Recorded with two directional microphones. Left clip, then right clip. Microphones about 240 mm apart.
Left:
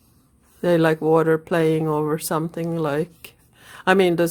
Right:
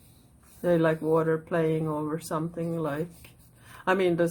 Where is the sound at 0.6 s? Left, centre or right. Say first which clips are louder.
Left 6 dB; left.